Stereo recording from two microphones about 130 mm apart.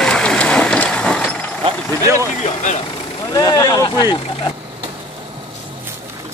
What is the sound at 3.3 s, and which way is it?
Speech, 30° left (ahead or behind).